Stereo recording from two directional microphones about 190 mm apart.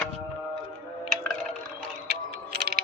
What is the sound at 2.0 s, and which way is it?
Music, 55° right (ahead or behind).